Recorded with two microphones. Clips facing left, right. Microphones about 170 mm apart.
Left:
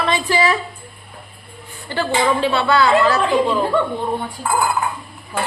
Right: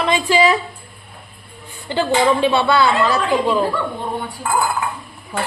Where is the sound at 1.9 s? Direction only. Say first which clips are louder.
Right 2 dB; 15° right (ahead or behind).